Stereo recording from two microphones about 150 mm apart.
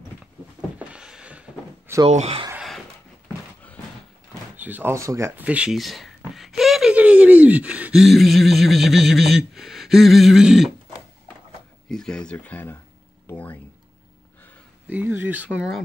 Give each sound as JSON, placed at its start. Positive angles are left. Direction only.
{"t": 0.7, "sound": "a sound", "side_deg": -5}
{"t": 2.0, "sound": "speech", "side_deg": -45}
{"t": 4.6, "sound": "speech", "side_deg": -10}
{"t": 11.9, "sound": "speech", "side_deg": 5}
{"t": 13.3, "sound": "a sound", "side_deg": 10}
{"t": 14.9, "sound": "speech", "side_deg": -10}